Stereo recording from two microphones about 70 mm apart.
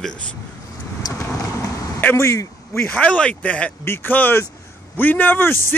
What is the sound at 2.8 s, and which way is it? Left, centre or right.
Speech, left.